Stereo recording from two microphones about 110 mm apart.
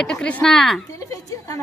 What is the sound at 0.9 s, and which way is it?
Speech, 30° left (ahead or behind).